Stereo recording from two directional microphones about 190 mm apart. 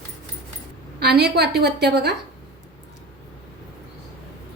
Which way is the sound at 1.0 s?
60° right (ahead or behind).